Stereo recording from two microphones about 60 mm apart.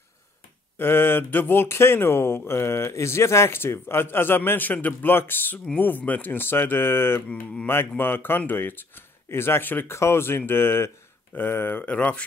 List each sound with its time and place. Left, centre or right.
0.7 s speech: left